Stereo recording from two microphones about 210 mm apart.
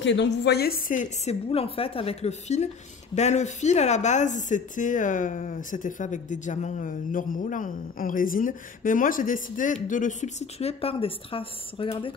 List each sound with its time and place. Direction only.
0.0 s speech: 55° left (ahead or behind); by 12.1 s 25° left (ahead or behind)